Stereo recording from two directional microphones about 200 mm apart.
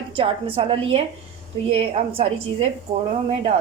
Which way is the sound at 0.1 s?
25° right (ahead or behind).